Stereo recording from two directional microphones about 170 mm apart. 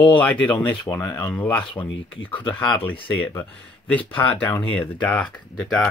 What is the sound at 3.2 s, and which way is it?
Speech, 15° left (ahead or behind).